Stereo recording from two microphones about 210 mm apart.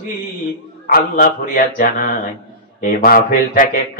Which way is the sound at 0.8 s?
45° left (ahead or behind).